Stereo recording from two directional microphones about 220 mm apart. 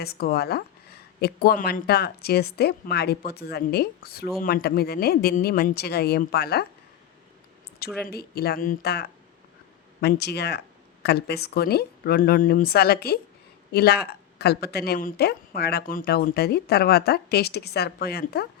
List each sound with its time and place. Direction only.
0.0 s speech: 45° left (ahead or behind)
8.0 s speech: 45° left (ahead or behind)